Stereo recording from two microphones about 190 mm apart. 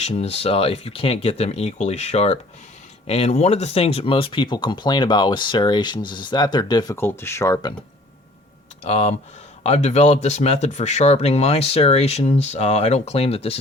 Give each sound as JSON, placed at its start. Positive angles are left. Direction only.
{"t": 0.0, "sound": "speech", "side_deg": 35}
{"t": 8.8, "sound": "speech", "side_deg": 35}